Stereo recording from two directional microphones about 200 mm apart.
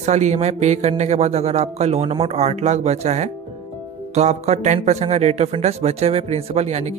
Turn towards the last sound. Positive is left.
turn(degrees=-35)  # may be behind; listen again after turning